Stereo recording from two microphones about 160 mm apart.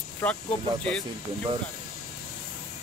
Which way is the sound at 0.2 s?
10° left (ahead or behind).